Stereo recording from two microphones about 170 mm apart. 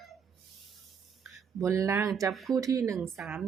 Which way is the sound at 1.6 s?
20° right (ahead or behind).